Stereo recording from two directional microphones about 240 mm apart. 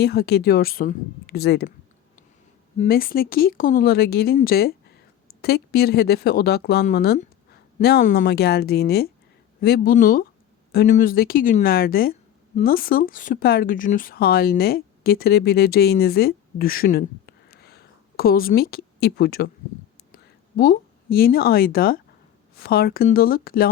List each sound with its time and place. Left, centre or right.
0.0 s speech: left
2.7 s speech: left
20.6 s speech: left